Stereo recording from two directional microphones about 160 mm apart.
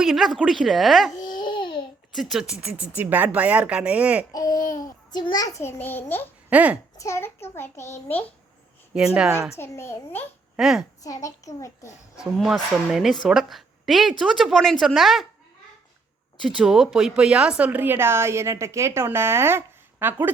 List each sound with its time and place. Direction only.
0.0 s a woman's voice: centre (ahead or behind)
1.2 s babbling: 25° left (ahead or behind)
2.1 s speech: centre (ahead or behind)
4.3 s a child's voice: 25° left (ahead or behind)
6.5 s a child's voice: 10° right (ahead or behind)
7.0 s a child's voice: 15° left (ahead or behind)
8.9 s speech: 5° right (ahead or behind)
9.6 s a child's voice: 15° left (ahead or behind)
10.6 s a woman's voice: 5° right (ahead or behind)
11.0 s a child's voice: 20° left (ahead or behind)
12.2 s a woman's voice: 5° right (ahead or behind)
16.4 s speech: 5° right (ahead or behind)